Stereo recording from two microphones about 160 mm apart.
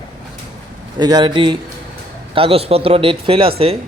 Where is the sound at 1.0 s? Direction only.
25° right (ahead or behind).